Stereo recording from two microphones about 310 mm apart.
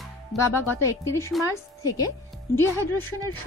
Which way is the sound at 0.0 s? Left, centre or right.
Centre.